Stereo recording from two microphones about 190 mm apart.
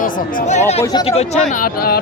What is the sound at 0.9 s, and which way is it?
Speech, 30° left (ahead or behind).